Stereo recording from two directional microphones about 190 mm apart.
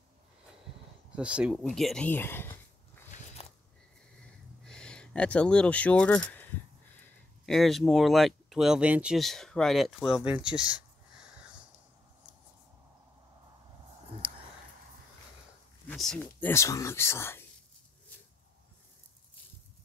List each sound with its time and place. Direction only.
1.1 s speech: 5° right (ahead or behind); by 2.5 s 10° left (ahead or behind)
4.6 s speech: 5° left (ahead or behind)
14.2 s a sound: 5° right (ahead or behind)
15.9 s speech: 5° left (ahead or behind)